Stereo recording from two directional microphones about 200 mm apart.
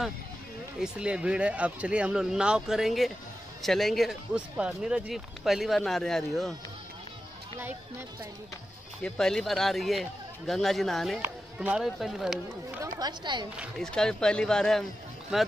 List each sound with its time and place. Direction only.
0.7 s speech: 5° right (ahead or behind)
9.0 s speech: 5° left (ahead or behind)
12.8 s speech: 20° right (ahead or behind)
13.6 s speech: centre (ahead or behind)